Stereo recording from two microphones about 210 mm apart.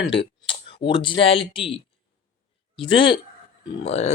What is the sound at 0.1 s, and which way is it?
Speech, 25° left (ahead or behind).